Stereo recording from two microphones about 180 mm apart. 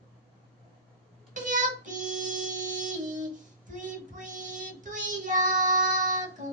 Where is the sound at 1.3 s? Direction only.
45° right (ahead or behind).